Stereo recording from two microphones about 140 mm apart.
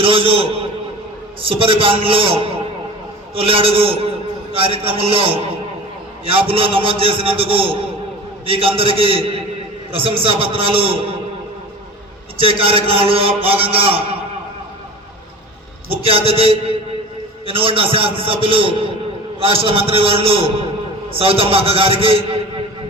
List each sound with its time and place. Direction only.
0.0 s a sound: 40° right (ahead or behind)
1.4 s a man's voice: 40° right (ahead or behind)
12.4 s a man's voice: 40° right (ahead or behind)
15.9 s a man's voice: 45° right (ahead or behind)